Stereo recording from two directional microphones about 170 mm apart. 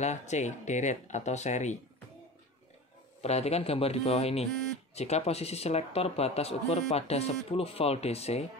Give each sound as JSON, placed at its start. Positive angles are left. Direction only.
{"t": 0.0, "sound": "speech", "side_deg": 45}
{"t": 3.2, "sound": "speech", "side_deg": 40}